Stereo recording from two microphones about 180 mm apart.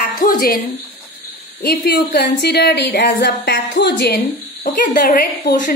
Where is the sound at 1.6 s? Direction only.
65° left (ahead or behind).